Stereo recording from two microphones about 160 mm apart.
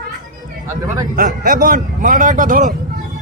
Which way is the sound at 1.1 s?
55° right (ahead or behind).